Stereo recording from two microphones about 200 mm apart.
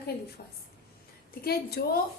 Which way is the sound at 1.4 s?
50° left (ahead or behind).